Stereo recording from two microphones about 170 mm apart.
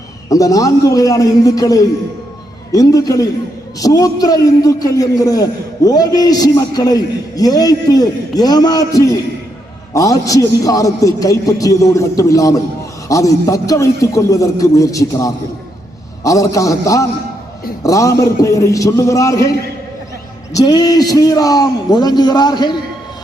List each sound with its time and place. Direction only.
0.3 s a man's voice: 20° left (ahead or behind)
20.5 s a man's voice: 20° left (ahead or behind)